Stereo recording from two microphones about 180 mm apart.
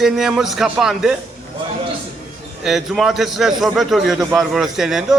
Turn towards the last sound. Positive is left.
turn(degrees=0)  # may be behind; listen again after turning